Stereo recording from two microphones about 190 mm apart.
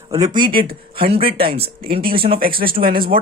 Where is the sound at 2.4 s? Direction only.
50° right (ahead or behind).